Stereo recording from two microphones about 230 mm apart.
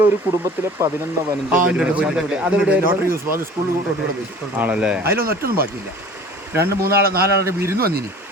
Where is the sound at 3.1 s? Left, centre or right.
Right.